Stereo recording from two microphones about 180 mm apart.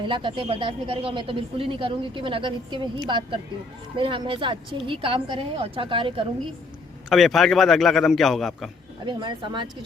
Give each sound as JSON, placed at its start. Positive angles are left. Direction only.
{"t": 0.0, "sound": "speech", "side_deg": -25}
{"t": 7.1, "sound": "a man's voice", "side_deg": 0}
{"t": 9.0, "sound": "speech", "side_deg": -25}